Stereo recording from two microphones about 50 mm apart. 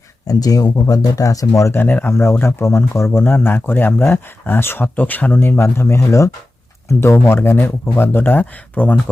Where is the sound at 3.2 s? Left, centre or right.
Left.